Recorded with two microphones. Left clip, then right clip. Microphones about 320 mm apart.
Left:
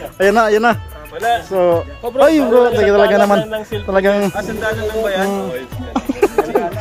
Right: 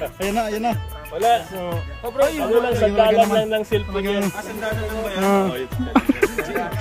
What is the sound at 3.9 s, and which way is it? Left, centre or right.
Speech, centre.